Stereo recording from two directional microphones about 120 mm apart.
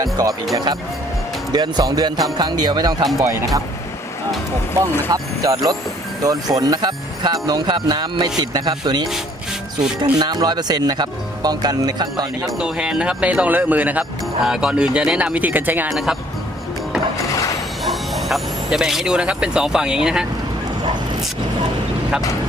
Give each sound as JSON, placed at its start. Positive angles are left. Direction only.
{"t": 0.0, "sound": "speech", "side_deg": -30}
{"t": 5.1, "sound": "speech", "side_deg": -30}
{"t": 12.5, "sound": "speech", "side_deg": -5}
{"t": 15.9, "sound": "speech", "side_deg": -5}
{"t": 17.8, "sound": "speech", "side_deg": 0}